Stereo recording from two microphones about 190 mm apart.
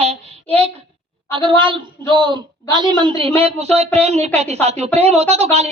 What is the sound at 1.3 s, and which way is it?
A woman's voice, 25° right (ahead or behind).